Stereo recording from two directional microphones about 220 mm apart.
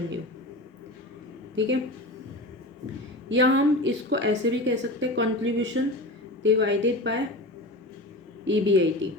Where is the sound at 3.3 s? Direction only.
55° right (ahead or behind).